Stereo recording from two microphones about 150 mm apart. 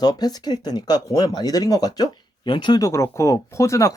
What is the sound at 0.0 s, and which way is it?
Speech, 25° left (ahead or behind).